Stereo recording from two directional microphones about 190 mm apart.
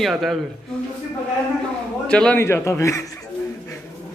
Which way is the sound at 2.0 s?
5° left (ahead or behind).